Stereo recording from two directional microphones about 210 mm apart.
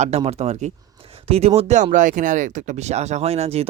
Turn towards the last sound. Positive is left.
turn(degrees=-30)  # may be behind; listen again after turning